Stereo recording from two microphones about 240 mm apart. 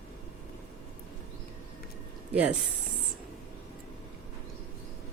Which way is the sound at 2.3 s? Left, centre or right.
Centre.